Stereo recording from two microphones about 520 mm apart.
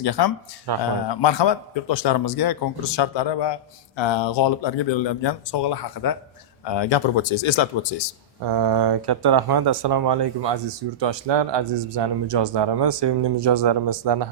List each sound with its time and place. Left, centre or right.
0.0 s speech: left
0.7 s speech: right
1.0 s speech: left
6.7 s speech: left
8.4 s speech: right